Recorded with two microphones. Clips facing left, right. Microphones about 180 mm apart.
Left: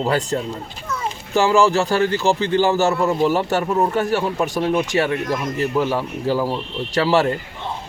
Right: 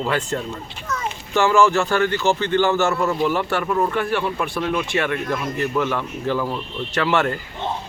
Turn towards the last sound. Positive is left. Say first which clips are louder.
# left 3 dB
turn(degrees=35)  # may be behind; listen again after turning